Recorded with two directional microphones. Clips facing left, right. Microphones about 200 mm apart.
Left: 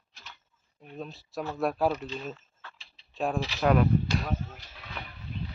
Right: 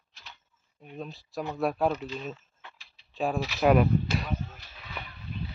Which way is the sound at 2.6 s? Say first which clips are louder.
Even; 20° right (ahead or behind).